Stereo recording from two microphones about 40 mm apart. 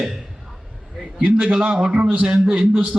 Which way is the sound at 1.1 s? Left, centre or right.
Right.